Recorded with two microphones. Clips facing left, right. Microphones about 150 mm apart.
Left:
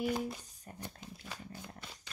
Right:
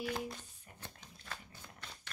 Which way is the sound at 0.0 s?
10° left (ahead or behind).